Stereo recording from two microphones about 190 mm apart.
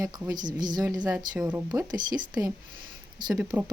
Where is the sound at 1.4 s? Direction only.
5° right (ahead or behind).